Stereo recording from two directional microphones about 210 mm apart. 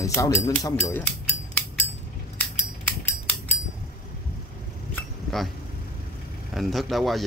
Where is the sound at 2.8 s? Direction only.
10° left (ahead or behind).